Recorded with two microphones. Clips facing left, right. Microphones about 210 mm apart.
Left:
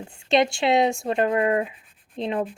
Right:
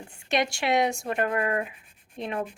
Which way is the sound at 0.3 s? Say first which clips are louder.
Left 6 dB; 25° left (ahead or behind).